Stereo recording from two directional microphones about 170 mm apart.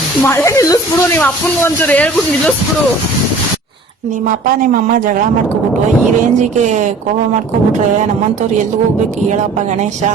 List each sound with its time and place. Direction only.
0.2 s speech: 15° left (ahead or behind)
4.4 s speech: 55° right (ahead or behind)
6.6 s speech: 45° right (ahead or behind)